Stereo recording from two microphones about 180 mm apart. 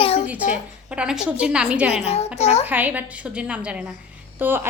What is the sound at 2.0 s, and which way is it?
Speech, 35° left (ahead or behind).